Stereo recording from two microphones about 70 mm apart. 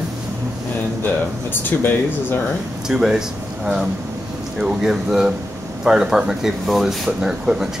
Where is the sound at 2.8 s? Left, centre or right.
Centre.